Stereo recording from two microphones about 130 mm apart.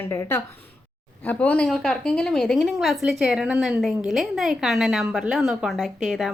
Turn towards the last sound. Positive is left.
turn(degrees=0)  # may be behind; listen again after turning